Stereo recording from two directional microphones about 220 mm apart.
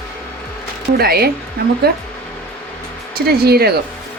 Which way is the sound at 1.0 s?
45° right (ahead or behind).